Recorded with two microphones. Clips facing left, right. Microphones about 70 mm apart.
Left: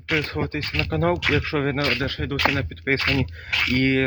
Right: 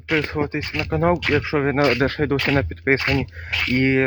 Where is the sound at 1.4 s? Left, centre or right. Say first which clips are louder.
Right 3 dB; centre.